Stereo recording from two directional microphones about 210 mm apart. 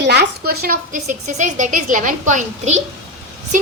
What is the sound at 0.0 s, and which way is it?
A woman's voice, 55° right (ahead or behind).